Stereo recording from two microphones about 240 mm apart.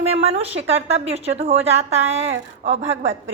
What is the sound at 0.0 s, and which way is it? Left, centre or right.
A woman's voice, right.